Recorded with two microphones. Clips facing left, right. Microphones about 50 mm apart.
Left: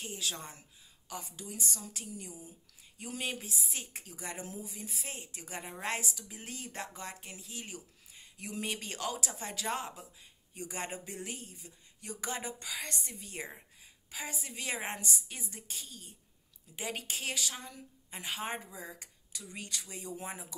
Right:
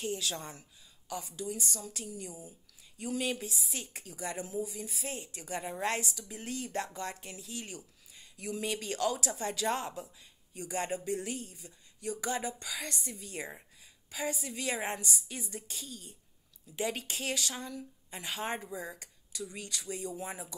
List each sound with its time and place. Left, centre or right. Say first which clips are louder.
0.0 s speech: right 4 dB; centre
0.6 s speech: right 2 dB; left; by 18.6 s centre
18.7 s speech: right 5 dB; centre
18.9 s speech: right 8 dB; left